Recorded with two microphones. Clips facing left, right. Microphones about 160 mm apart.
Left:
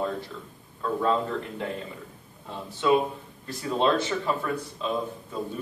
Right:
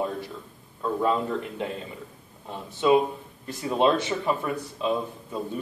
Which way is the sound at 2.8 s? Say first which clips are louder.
Right 2 dB; 20° right (ahead or behind).